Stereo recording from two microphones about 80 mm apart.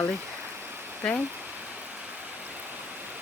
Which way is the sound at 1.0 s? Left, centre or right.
Centre.